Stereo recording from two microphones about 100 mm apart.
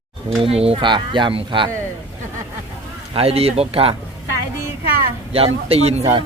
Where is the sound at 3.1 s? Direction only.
75° right (ahead or behind).